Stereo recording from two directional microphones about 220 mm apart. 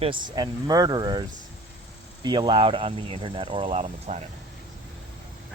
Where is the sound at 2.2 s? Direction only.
20° right (ahead or behind).